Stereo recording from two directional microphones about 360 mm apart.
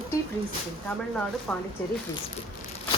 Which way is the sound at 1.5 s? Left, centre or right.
Centre.